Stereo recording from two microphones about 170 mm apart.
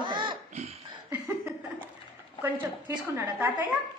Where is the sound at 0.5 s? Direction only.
40° right (ahead or behind).